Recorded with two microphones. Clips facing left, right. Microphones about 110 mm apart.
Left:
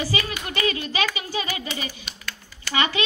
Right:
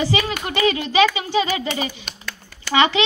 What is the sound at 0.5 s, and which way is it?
A child's voice, 25° right (ahead or behind).